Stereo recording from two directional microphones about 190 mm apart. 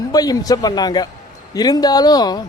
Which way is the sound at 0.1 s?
20° left (ahead or behind).